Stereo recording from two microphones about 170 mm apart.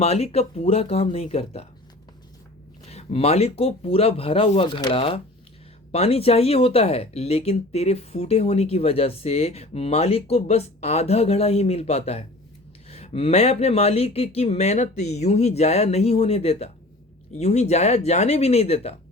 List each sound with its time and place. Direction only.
0.0 s speech: 40° left (ahead or behind)
2.9 s speech: 35° left (ahead or behind)